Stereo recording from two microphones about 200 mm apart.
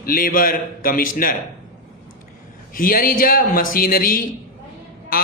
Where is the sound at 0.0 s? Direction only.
45° left (ahead or behind).